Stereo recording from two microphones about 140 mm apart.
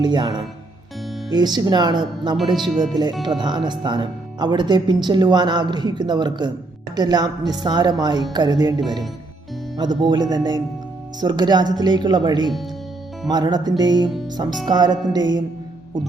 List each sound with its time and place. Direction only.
0.0 s speech: 30° right (ahead or behind)
2.6 s speech: centre (ahead or behind)
3.2 s a woman's voice: 30° right (ahead or behind)